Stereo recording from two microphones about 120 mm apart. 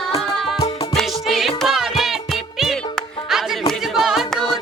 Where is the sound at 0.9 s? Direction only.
Centre (ahead or behind).